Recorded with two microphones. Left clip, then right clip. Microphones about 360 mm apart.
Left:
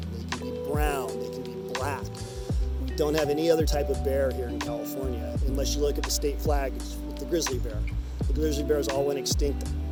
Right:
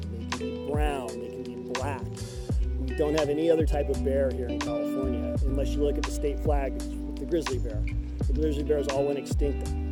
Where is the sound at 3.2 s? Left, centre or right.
Centre.